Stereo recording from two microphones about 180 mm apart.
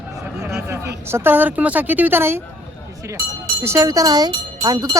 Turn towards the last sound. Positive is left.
turn(degrees=-20)  # may be behind; listen again after turning